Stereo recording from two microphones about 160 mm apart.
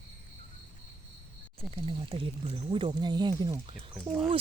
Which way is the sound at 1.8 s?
35° right (ahead or behind).